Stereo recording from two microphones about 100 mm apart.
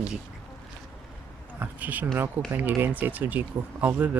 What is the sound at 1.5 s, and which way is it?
Speech, 15° right (ahead or behind).